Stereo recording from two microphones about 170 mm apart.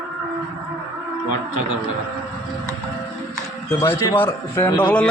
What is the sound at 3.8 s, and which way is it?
A man's voice, 15° left (ahead or behind).